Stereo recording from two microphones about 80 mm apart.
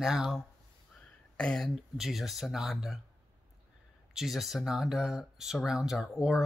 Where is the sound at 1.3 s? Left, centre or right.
Centre.